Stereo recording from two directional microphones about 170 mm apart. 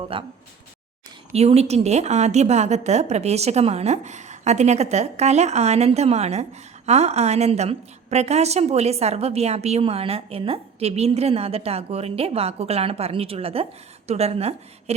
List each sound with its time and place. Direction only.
0.0 s a woman's voice: 30° right (ahead or behind)
1.3 s a woman's voice: 40° right (ahead or behind)